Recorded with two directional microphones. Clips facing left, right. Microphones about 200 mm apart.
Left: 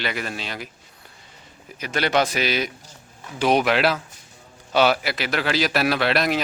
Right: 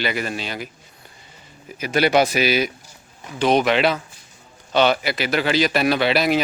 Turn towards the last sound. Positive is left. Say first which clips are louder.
# right 3 dB
turn(degrees=0)  # may be behind; listen again after turning